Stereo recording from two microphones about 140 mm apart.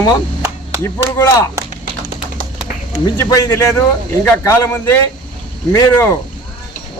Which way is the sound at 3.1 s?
20° left (ahead or behind).